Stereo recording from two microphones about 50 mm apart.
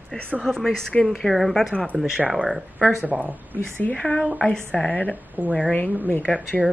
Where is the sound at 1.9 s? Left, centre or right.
Centre.